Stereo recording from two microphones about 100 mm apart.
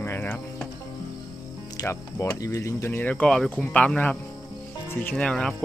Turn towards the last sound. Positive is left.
turn(degrees=5)  # may be behind; listen again after turning